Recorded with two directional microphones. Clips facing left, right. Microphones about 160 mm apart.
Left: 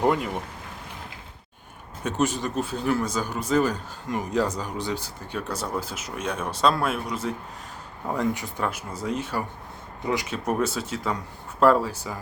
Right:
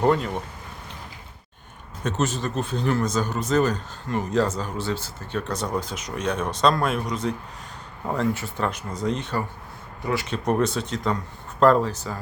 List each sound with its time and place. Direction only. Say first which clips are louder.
0.0 s speech: right 2 dB; 10° left (ahead or behind)
2.0 s speech: even; 10° left (ahead or behind)